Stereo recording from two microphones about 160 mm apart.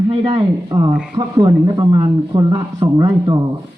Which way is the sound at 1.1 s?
25° right (ahead or behind).